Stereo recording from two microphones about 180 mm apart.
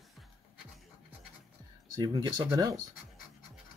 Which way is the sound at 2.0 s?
20° right (ahead or behind).